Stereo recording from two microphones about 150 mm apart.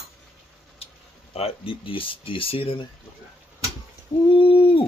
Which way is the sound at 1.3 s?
40° left (ahead or behind).